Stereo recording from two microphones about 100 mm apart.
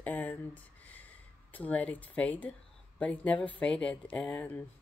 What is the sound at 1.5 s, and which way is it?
A woman's voice, 15° left (ahead or behind).